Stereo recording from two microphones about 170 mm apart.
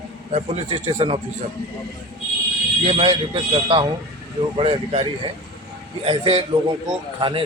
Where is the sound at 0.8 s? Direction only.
40° right (ahead or behind).